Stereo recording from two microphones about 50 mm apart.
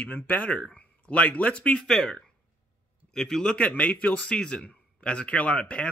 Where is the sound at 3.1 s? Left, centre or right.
Centre.